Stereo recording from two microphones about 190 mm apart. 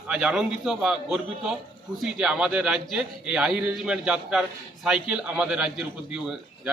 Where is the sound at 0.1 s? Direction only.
5° right (ahead or behind).